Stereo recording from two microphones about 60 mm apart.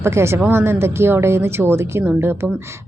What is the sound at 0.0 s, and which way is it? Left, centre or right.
Speech, right.